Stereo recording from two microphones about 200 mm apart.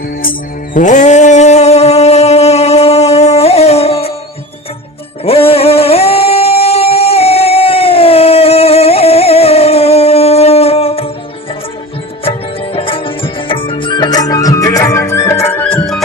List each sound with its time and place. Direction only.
0.2 s music: 45° left (ahead or behind)
5.2 s singing: 30° left (ahead or behind)
12.7 s music: 25° left (ahead or behind); by 16.0 s 10° left (ahead or behind)